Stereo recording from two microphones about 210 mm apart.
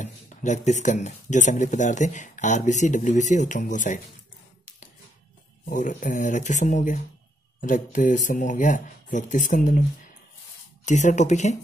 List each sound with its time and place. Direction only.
0.0 s speech: 35° left (ahead or behind)
5.7 s speech: 40° left (ahead or behind)
10.9 s speech: 35° left (ahead or behind)